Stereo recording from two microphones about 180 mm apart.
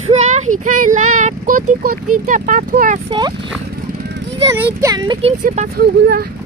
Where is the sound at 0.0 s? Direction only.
40° right (ahead or behind).